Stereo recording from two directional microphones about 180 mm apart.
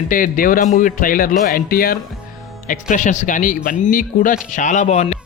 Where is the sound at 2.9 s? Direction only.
45° left (ahead or behind).